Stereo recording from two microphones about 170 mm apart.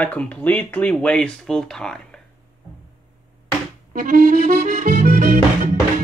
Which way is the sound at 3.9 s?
60° right (ahead or behind).